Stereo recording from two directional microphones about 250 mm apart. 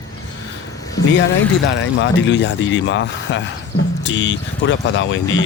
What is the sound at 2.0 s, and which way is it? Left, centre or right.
Speech, left.